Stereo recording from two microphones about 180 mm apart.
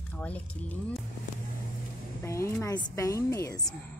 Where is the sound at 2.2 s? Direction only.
15° left (ahead or behind).